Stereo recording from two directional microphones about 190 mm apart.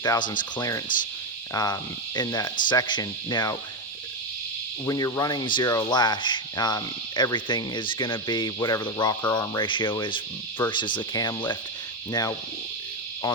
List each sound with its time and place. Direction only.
0.0 s speech: 20° left (ahead or behind)
4.9 s speech: 20° left (ahead or behind)